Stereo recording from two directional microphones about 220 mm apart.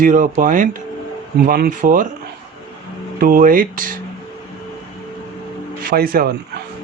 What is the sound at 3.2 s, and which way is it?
Speech, 40° right (ahead or behind).